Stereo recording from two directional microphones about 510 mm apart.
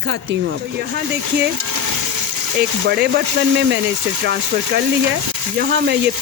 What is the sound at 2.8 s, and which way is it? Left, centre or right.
Speech, centre.